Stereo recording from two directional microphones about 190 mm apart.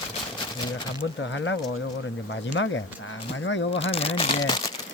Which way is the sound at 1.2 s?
80° left.